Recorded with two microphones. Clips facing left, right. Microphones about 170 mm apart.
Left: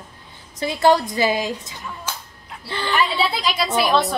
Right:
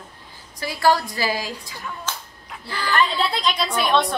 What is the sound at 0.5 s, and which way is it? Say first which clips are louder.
A woman's voice: left 3 dB; 20° left (ahead or behind).